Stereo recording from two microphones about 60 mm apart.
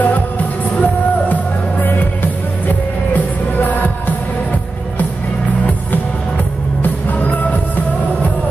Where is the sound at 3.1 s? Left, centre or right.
Left.